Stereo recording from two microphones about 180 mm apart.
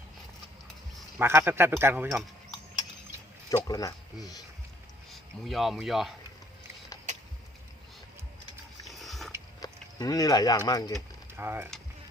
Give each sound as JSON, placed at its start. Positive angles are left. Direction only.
{"t": 1.2, "sound": "speech", "side_deg": -10}
{"t": 3.5, "sound": "speech", "side_deg": 20}
{"t": 5.1, "sound": "speech", "side_deg": 0}
{"t": 8.9, "sound": "a sound", "side_deg": 0}
{"t": 9.6, "sound": "livestock", "side_deg": 20}
{"t": 10.7, "sound": "speech", "side_deg": 20}
{"t": 11.3, "sound": "speech", "side_deg": -10}